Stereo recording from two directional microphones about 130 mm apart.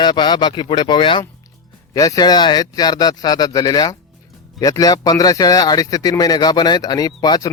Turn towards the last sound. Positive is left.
turn(degrees=30)  # may be behind; listen again after turning